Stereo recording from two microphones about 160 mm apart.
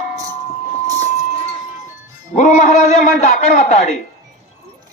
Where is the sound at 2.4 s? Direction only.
50° left (ahead or behind).